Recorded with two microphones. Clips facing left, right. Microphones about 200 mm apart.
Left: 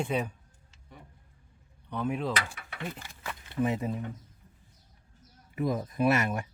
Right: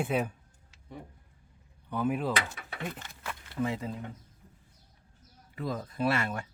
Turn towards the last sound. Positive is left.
turn(degrees=15)  # may be behind; listen again after turning